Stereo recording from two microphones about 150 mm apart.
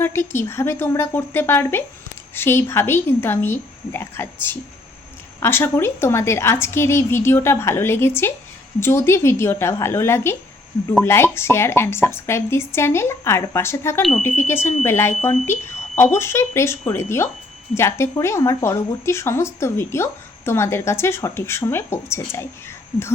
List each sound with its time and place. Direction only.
0.0 s speech: 15° left (ahead or behind)